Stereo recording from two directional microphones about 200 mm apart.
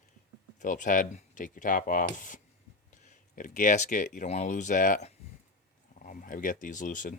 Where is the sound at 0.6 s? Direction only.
40° left (ahead or behind).